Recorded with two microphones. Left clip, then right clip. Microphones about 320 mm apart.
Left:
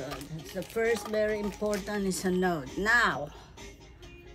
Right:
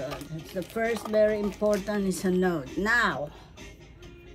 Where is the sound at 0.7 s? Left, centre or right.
Centre.